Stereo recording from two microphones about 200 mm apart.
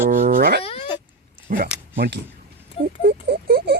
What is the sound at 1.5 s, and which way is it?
Speech, 45° right (ahead or behind).